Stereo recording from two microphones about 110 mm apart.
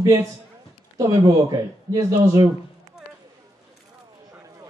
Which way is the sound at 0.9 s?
35° right (ahead or behind).